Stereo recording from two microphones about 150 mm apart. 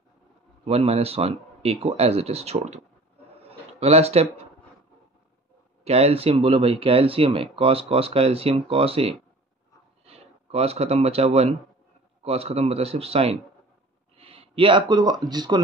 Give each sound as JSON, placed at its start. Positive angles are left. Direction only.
{"t": 0.7, "sound": "speech", "side_deg": -40}
{"t": 3.3, "sound": "a sound", "side_deg": -45}
{"t": 5.9, "sound": "speech", "side_deg": -45}